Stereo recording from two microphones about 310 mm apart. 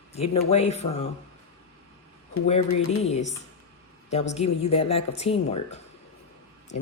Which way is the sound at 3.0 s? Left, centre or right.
Left.